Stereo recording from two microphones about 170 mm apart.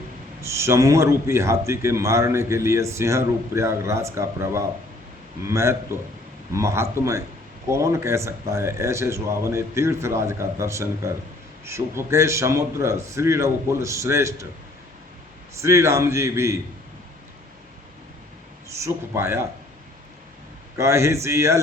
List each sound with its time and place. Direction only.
0.4 s a man's voice: 15° right (ahead or behind)
15.6 s a man's voice: 15° right (ahead or behind)
18.8 s a man's voice: 15° right (ahead or behind)
20.7 s a man's voice: 15° right (ahead or behind)